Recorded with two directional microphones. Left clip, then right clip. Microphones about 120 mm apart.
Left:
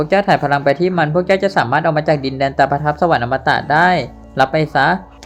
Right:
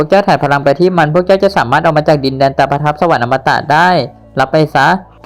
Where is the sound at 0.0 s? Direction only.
25° right (ahead or behind).